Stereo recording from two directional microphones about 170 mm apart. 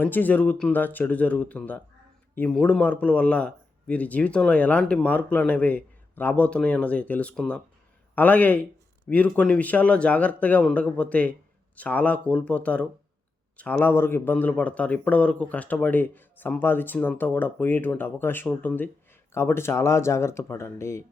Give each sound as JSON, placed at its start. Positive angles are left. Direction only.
{"t": 0.0, "sound": "a man's voice", "side_deg": 10}